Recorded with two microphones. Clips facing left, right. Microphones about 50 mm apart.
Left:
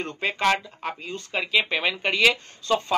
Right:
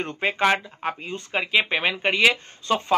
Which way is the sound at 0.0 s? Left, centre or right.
Right.